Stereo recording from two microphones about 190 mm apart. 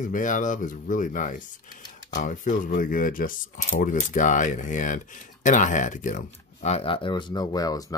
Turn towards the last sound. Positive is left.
turn(degrees=20)  # may be behind; listen again after turning